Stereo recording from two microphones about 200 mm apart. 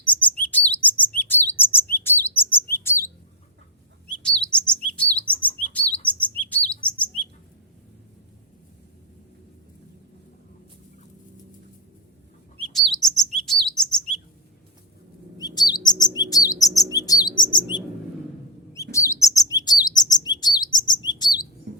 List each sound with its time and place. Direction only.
0.0 s chirp: 5° left (ahead or behind)
4.2 s chirp: 5° left (ahead or behind)
12.5 s chirp: centre (ahead or behind)
15.4 s chirp: 20° left (ahead or behind)
21.7 s chirp: 55° right (ahead or behind)